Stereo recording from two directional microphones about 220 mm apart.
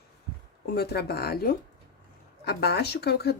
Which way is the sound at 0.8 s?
45° left (ahead or behind).